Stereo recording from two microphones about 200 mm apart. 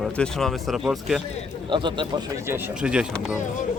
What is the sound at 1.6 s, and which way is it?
Speech, 25° right (ahead or behind).